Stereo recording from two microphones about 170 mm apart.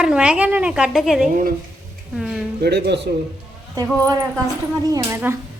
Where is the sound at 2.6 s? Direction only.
80° right.